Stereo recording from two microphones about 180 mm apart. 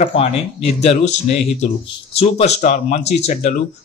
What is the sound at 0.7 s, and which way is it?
Speech, 35° left (ahead or behind).